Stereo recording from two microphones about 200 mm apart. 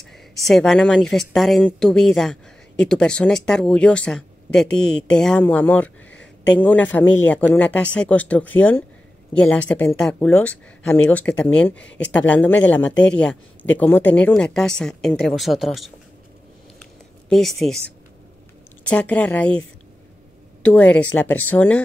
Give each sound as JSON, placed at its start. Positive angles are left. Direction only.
{"t": 0.3, "sound": "speech", "side_deg": 0}
{"t": 17.3, "sound": "speech", "side_deg": 0}
{"t": 20.6, "sound": "speech", "side_deg": 5}